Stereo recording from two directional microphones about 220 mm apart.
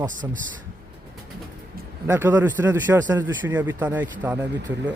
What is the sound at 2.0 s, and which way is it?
Speech, 10° right (ahead or behind).